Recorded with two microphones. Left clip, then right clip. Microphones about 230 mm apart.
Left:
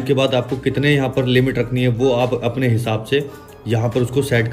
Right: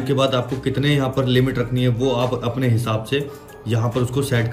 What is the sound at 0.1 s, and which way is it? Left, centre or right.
Speech, centre.